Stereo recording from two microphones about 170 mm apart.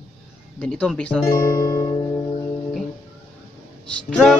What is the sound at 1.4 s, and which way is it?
Music, 25° left (ahead or behind).